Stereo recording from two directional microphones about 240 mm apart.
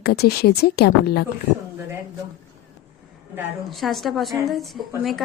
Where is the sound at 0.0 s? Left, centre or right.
Left.